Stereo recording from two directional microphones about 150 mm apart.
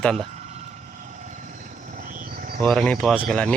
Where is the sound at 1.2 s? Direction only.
55° right (ahead or behind); by 2.6 s 75° right (ahead or behind).